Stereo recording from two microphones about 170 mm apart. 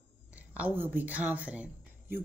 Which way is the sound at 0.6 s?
10° right (ahead or behind).